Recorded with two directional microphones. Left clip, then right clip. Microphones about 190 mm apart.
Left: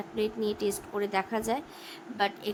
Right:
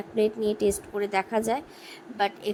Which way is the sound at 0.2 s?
20° right (ahead or behind).